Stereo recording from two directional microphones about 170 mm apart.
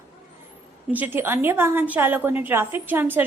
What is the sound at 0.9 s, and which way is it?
A woman's voice, 10° right (ahead or behind).